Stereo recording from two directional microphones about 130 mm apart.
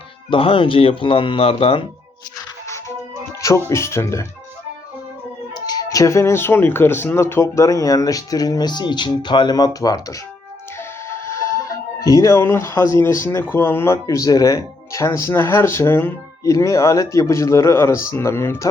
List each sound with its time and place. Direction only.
0.3 s speech: 45° left (ahead or behind)
3.4 s speech: 25° left (ahead or behind)
5.5 s speech: 30° left (ahead or behind)
11.1 s music: 20° left (ahead or behind)
13.5 s speech: 20° left (ahead or behind)